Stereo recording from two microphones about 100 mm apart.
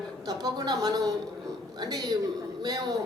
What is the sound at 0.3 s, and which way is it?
A woman's voice, 40° right (ahead or behind).